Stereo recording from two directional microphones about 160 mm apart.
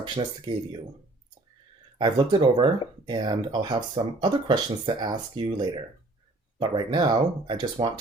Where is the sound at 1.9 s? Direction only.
30° right (ahead or behind).